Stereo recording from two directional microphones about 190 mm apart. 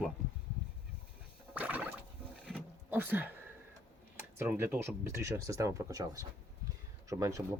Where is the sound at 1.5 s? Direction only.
5° right (ahead or behind).